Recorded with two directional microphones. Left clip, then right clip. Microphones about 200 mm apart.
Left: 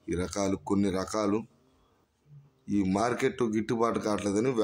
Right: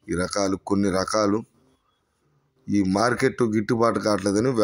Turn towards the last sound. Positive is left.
turn(degrees=-20)  # may be behind; listen again after turning